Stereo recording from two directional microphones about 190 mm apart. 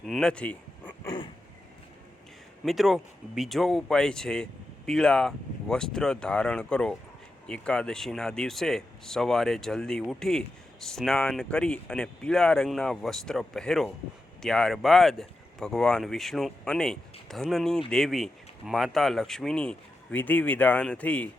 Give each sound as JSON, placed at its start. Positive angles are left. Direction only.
{"t": 0.0, "sound": "a sound", "side_deg": 0}
{"t": 1.0, "sound": "dog", "side_deg": 20}
{"t": 2.6, "sound": "speech", "side_deg": 0}